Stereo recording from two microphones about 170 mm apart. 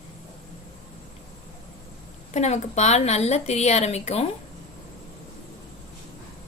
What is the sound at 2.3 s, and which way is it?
A woman's voice, 40° left (ahead or behind).